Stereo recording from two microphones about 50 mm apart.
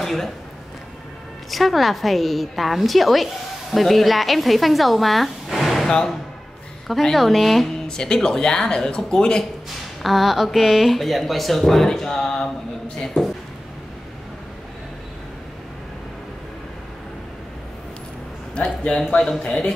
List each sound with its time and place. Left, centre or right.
0.0 s speech: centre
1.5 s speech: centre
5.9 s speech: centre
6.9 s speech: centre
7.9 s speech: centre
10.0 s speech: centre
18.5 s a man's voice: centre